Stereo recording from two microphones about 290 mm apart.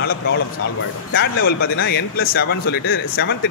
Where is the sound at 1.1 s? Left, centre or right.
Left.